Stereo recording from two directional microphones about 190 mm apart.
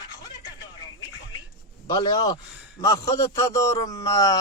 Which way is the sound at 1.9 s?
20° left (ahead or behind).